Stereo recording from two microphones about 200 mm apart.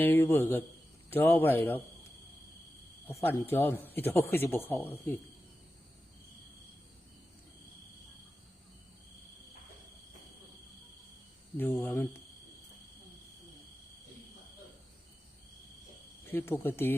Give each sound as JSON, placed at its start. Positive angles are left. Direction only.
{"t": 0.0, "sound": "speech", "side_deg": 10}
{"t": 3.1, "sound": "speech", "side_deg": 10}
{"t": 11.5, "sound": "speech", "side_deg": 10}
{"t": 16.2, "sound": "speech", "side_deg": 10}